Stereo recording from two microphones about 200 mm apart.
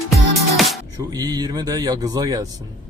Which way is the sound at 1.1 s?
20° right (ahead or behind).